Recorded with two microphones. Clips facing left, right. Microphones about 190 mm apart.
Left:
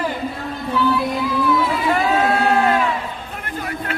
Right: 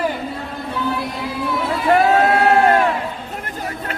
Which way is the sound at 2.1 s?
50° right (ahead or behind).